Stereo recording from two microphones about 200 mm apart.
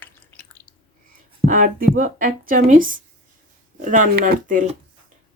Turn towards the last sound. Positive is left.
turn(degrees=-40)  # may be behind; listen again after turning